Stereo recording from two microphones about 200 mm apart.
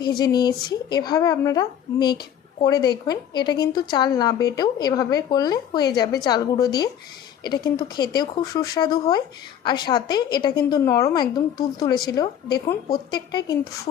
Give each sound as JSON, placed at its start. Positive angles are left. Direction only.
{"t": 0.0, "sound": "speech", "side_deg": 20}